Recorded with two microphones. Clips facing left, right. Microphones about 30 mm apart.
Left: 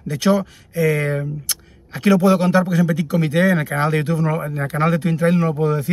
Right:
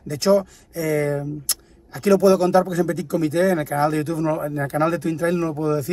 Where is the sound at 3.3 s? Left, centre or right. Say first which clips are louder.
Left 2 dB; left.